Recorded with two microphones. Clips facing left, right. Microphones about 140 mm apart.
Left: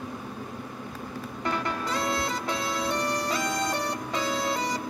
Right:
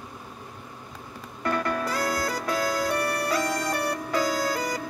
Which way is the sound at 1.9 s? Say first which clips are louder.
Right 1 dB; 25° left (ahead or behind).